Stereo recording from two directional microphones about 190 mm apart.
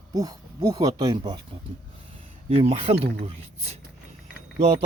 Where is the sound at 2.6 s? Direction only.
30° right (ahead or behind).